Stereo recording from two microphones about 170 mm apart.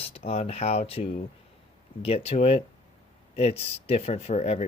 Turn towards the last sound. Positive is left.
turn(degrees=40)  # may be behind; listen again after turning